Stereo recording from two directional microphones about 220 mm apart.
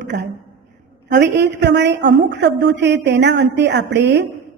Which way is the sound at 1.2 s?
50° right (ahead or behind).